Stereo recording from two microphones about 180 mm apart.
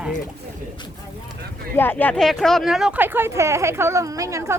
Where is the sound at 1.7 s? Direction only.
10° left (ahead or behind); by 4.6 s 15° right (ahead or behind).